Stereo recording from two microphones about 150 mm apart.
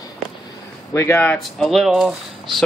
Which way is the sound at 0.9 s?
15° left (ahead or behind).